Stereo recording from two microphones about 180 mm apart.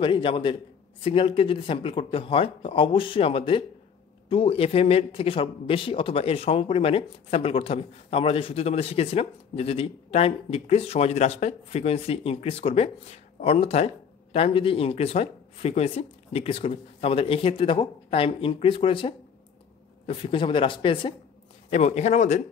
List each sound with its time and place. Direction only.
0.0 s speech: 30° left (ahead or behind)
21.6 s speech: 40° left (ahead or behind)